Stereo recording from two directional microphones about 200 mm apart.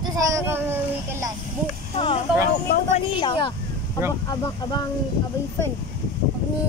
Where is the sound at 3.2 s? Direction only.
20° left (ahead or behind).